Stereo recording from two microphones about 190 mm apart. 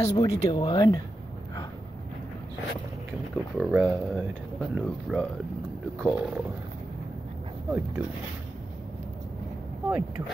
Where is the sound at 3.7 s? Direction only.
5° right (ahead or behind).